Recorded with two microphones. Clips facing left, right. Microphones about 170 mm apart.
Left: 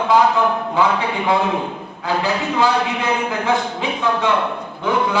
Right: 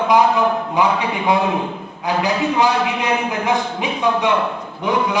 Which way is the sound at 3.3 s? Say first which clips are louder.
Even; 15° right (ahead or behind).